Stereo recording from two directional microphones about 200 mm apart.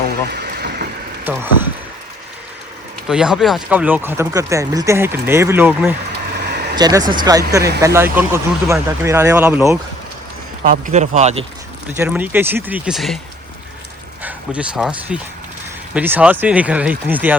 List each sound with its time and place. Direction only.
0.1 s vehicle: 55° right (ahead or behind)
1.2 s speech: 10° right (ahead or behind)
3.1 s speech: 5° right (ahead or behind)
6.3 s a sound: 55° right (ahead or behind)
6.7 s speech: 20° right (ahead or behind)
10.6 s speech: 40° right (ahead or behind)
11.9 s speech: 10° right (ahead or behind)
14.2 s speech: 5° right (ahead or behind)